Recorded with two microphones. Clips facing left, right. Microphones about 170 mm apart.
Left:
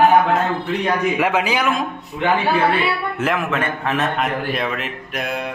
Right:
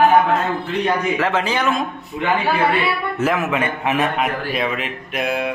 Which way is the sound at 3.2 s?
5° right (ahead or behind).